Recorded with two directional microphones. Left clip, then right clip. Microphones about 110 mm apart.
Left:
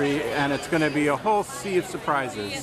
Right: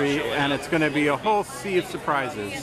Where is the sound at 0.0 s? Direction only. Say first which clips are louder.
Right 1 dB; 5° left (ahead or behind).